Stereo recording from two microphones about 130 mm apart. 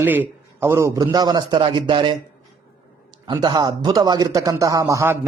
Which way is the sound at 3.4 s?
30° right (ahead or behind).